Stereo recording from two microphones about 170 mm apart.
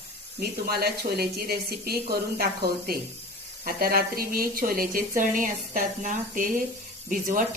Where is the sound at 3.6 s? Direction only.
60° right (ahead or behind).